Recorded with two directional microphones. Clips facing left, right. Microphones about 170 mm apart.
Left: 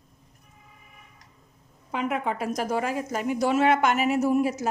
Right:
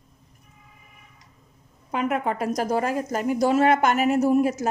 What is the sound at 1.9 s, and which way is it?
Speech, 50° right (ahead or behind).